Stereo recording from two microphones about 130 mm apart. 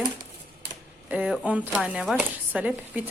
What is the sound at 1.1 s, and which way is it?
Speech, 10° right (ahead or behind).